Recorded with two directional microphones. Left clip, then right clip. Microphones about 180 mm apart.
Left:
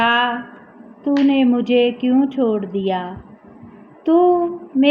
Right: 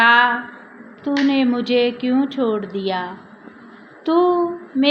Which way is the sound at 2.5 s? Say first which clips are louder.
Left 2 dB; centre (ahead or behind).